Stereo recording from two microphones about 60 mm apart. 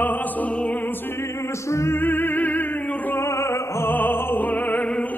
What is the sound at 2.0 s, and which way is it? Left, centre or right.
Music, left.